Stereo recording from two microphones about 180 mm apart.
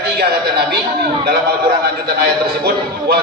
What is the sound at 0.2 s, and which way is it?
Speech, 65° right (ahead or behind).